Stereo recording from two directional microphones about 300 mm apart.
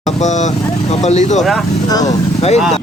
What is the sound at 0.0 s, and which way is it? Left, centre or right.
Speech, left.